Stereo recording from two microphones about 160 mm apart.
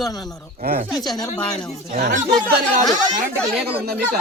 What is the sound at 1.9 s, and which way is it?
Speech, 55° right (ahead or behind).